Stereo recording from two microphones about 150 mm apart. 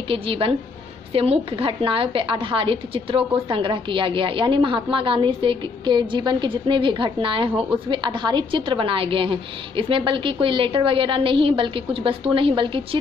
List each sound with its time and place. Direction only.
0.1 s a woman's voice: 35° right (ahead or behind)